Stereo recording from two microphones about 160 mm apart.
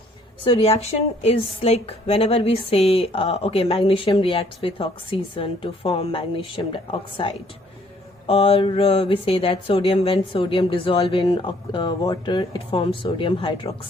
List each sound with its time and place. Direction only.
0.4 s a woman's voice: 40° left (ahead or behind)